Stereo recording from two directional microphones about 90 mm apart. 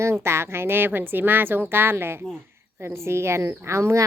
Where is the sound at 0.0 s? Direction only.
30° right (ahead or behind).